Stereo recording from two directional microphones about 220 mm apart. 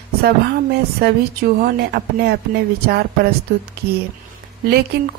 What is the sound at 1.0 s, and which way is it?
Speech, 45° right (ahead or behind).